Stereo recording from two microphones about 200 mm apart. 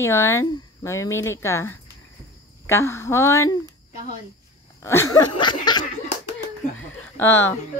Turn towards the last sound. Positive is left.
turn(degrees=10)  # may be behind; listen again after turning